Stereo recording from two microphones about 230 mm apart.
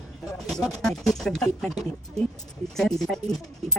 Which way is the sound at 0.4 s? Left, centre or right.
Centre.